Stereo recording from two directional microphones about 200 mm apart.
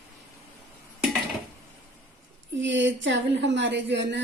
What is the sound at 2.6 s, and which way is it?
A woman's voice, 65° right (ahead or behind).